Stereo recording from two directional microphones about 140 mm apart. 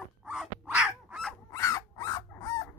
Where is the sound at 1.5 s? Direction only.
25° left (ahead or behind).